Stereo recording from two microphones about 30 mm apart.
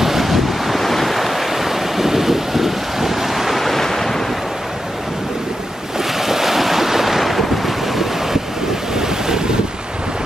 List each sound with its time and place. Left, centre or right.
0.0 s waves: centre
3.5 s waves: centre
5.9 s waves: centre
8.9 s waves: centre